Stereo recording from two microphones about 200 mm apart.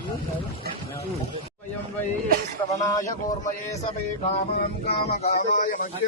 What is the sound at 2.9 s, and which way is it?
Speech, 15° left (ahead or behind).